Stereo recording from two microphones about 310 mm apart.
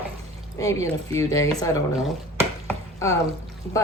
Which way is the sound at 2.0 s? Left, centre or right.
Centre.